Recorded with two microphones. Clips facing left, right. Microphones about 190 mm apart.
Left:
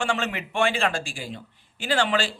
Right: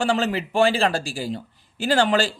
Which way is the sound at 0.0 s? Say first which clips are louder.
Right 5 dB; 35° right (ahead or behind).